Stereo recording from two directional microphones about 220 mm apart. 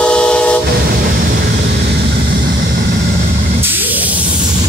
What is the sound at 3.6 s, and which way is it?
Spray, 10° right (ahead or behind).